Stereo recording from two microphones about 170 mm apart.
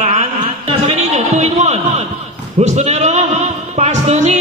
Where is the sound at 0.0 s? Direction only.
40° right (ahead or behind).